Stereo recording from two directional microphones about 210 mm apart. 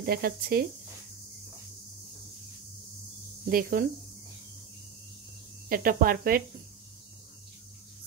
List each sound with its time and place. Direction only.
0.0 s speech: 45° right (ahead or behind)
3.4 s speech: 45° right (ahead or behind)
5.7 s speech: 45° right (ahead or behind)